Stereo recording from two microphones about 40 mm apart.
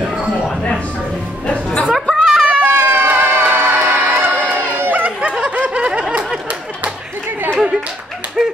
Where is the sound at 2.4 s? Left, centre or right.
Right.